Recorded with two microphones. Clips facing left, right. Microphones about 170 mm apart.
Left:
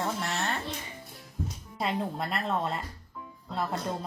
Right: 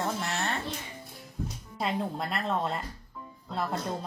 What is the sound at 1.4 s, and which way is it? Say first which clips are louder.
Music: even; centre (ahead or behind).